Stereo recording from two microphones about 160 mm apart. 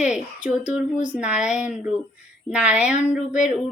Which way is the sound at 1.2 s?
5° right (ahead or behind).